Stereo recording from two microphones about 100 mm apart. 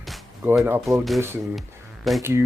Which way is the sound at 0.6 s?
20° right (ahead or behind).